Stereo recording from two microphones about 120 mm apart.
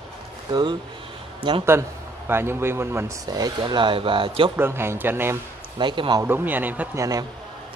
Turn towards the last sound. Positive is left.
turn(degrees=-30)  # may be behind; listen again after turning